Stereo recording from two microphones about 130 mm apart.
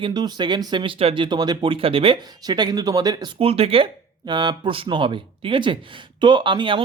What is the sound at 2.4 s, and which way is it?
Speech, 35° right (ahead or behind).